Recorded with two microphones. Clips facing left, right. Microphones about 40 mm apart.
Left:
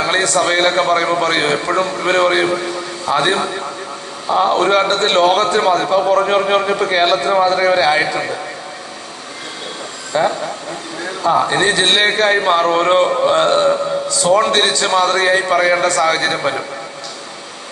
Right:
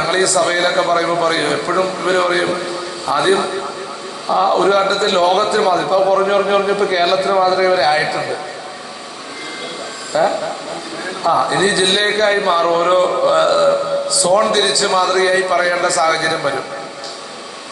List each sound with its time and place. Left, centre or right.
0.1 s a man's voice: left
4.3 s a man's voice: left
10.1 s a man's voice: left
11.4 s a man's voice: left